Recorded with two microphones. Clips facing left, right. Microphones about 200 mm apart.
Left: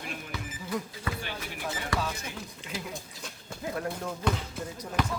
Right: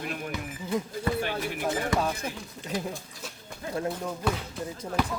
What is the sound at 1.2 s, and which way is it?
Speech, 50° right (ahead or behind).